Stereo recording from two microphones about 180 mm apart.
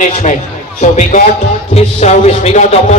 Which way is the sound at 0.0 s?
40° left (ahead or behind).